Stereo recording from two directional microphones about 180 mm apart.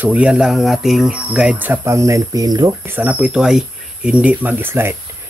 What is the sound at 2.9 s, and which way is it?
Speech, 10° right (ahead or behind).